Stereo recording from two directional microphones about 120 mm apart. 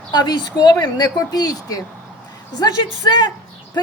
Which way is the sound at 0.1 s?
35° left (ahead or behind).